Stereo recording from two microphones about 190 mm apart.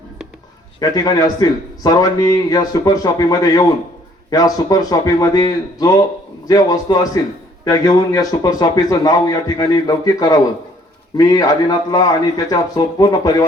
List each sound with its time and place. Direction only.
0.8 s a man's voice: 20° left (ahead or behind)